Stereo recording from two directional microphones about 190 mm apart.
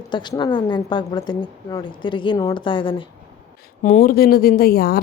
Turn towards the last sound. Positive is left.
turn(degrees=55)  # may be behind; listen again after turning